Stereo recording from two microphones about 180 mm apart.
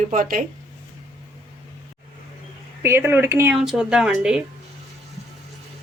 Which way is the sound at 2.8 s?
15° right (ahead or behind).